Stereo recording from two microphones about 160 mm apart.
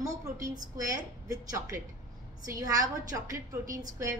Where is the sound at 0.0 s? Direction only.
20° right (ahead or behind).